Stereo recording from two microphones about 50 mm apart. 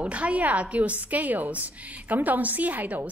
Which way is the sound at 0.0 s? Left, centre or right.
Right.